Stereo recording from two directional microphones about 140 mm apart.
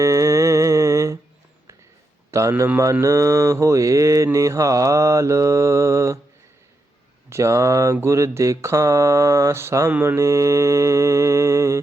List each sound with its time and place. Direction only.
0.0 s humming: 25° right (ahead or behind)
2.3 s mantra: 20° right (ahead or behind)
7.3 s mantra: 20° right (ahead or behind)